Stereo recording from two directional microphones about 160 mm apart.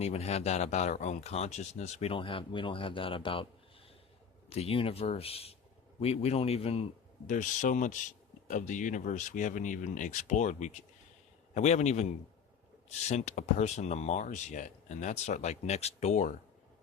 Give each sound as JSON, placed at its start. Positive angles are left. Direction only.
{"t": 0.0, "sound": "speech", "side_deg": 40}
{"t": 4.4, "sound": "speech", "side_deg": 40}
{"t": 7.3, "sound": "speech", "side_deg": 50}